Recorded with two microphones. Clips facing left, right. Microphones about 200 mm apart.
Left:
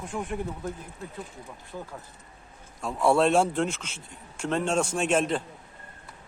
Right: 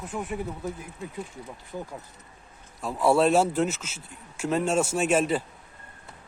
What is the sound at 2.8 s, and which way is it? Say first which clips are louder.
A man's voice: right 1 dB; 5° right (ahead or behind).